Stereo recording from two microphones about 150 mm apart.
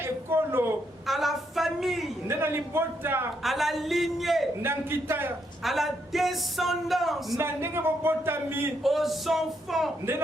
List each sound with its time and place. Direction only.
0.0 s a sound: 15° right (ahead or behind)
1.0 s a sound: centre (ahead or behind)
2.2 s a man's voice: 15° right (ahead or behind)
3.4 s speech: centre (ahead or behind)
4.6 s a man's voice: 15° right (ahead or behind)
5.6 s speech: centre (ahead or behind)
7.3 s a man's voice: 15° right (ahead or behind)
8.8 s speech: centre (ahead or behind)